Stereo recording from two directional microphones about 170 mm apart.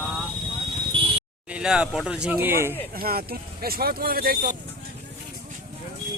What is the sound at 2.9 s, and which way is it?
Speech, 60° right (ahead or behind).